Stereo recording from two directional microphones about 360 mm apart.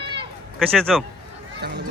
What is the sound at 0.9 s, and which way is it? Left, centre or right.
Speech, centre.